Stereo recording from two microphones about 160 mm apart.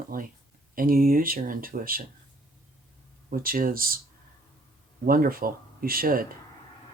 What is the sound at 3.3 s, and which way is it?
Speech, 65° right (ahead or behind).